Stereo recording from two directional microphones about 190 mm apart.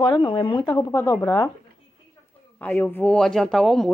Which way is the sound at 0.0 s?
25° left (ahead or behind).